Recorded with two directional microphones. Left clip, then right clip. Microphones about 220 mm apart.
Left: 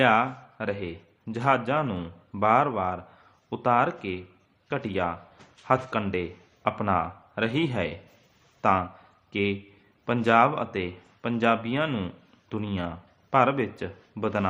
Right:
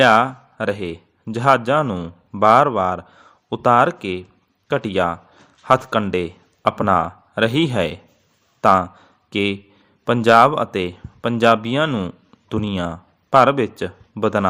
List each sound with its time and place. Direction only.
0.0 s a man's voice: 35° right (ahead or behind)